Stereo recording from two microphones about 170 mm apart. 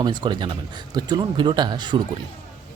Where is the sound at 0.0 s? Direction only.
25° right (ahead or behind).